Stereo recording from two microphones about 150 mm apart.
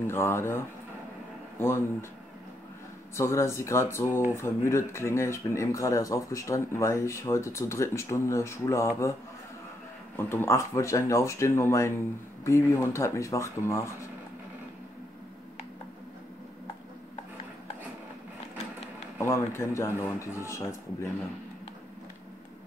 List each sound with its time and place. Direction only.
0.0 s speech: 15° left (ahead or behind)
3.2 s speech: 20° left (ahead or behind)
19.1 s speech: 20° left (ahead or behind)